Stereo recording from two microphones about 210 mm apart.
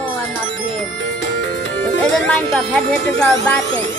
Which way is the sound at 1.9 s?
5° left (ahead or behind).